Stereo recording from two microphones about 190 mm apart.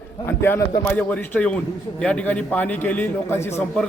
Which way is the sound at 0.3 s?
10° left (ahead or behind).